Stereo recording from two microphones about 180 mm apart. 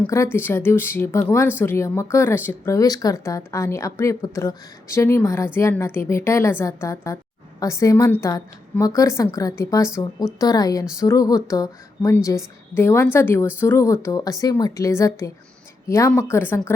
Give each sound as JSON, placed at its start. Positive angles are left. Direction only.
{"t": 0.0, "sound": "speech", "side_deg": 15}